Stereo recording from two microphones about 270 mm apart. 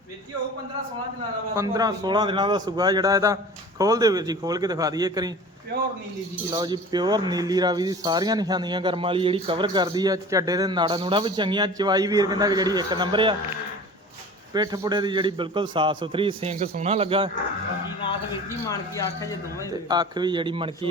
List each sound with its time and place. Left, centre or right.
1.5 s speech: centre
6.5 s speech: centre
14.5 s speech: centre
18.7 s speech: centre
19.9 s speech: centre